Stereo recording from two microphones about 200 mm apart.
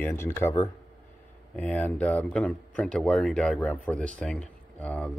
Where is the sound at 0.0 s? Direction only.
10° left (ahead or behind).